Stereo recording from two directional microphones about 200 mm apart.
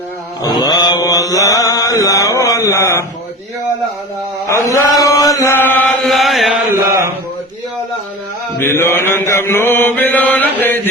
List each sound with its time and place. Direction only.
0.4 s mantra: 20° left (ahead or behind)
4.4 s chant: 15° left (ahead or behind); by 6.5 s centre (ahead or behind)
8.5 s mantra: 10° left (ahead or behind)